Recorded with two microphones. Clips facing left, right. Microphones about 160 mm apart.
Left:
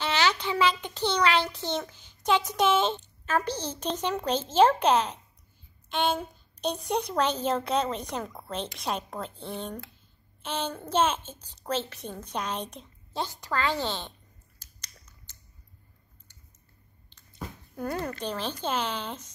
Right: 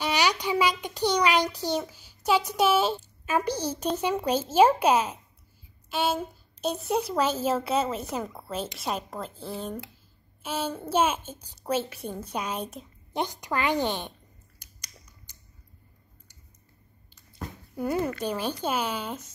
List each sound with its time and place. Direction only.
0.0 s a child's voice: 15° right (ahead or behind)
13.1 s a child's voice: 15° right (ahead or behind)
14.6 s a sound: 10° right (ahead or behind)
17.7 s a child's voice: 5° right (ahead or behind)